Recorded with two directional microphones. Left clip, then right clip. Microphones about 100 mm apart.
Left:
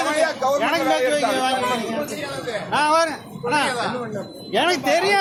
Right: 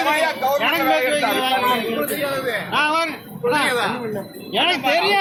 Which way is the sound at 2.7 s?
45° left (ahead or behind).